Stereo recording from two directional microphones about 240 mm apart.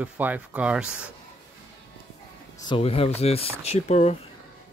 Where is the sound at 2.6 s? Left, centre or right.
Left.